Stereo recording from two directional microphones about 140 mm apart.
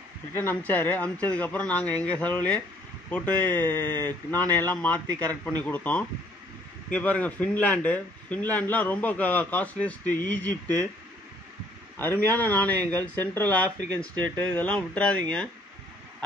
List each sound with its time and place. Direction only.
0.3 s a man's voice: 15° left (ahead or behind)
12.0 s a man's voice: 15° left (ahead or behind)